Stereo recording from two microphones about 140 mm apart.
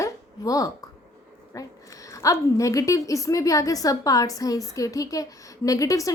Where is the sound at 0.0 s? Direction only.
25° left (ahead or behind).